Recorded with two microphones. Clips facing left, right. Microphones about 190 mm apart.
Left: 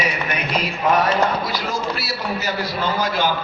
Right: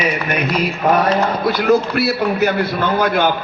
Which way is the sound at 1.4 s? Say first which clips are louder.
Right 10 dB; 55° right (ahead or behind).